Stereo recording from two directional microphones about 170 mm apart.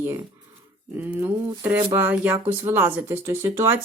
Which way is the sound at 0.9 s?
10° right (ahead or behind).